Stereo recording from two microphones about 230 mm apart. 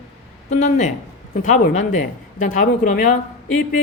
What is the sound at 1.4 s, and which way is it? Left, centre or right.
Speech, left.